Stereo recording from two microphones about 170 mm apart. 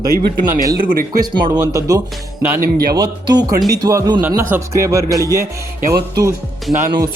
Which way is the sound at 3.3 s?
25° right (ahead or behind).